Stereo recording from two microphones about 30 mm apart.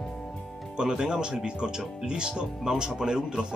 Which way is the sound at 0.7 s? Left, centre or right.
Right.